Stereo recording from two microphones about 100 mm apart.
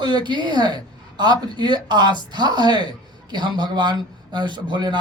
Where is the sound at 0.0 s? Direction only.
45° right (ahead or behind).